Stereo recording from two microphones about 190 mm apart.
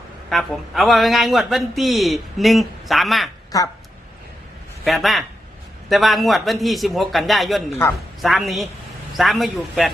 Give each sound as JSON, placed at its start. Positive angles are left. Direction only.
{"t": 0.3, "sound": "a man's voice", "side_deg": 0}
{"t": 4.9, "sound": "a man's voice", "side_deg": 0}